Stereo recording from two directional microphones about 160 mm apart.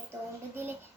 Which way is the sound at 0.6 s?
15° right (ahead or behind).